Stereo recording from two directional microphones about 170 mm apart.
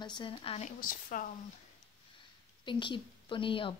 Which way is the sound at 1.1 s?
55° left (ahead or behind).